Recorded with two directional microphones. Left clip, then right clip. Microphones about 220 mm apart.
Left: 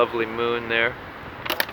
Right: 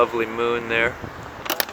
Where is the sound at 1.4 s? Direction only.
45° right (ahead or behind).